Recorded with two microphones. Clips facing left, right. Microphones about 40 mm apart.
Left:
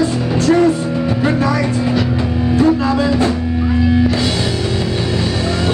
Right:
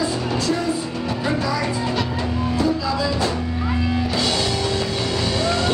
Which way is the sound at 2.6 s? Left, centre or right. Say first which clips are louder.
Left 9 dB; left.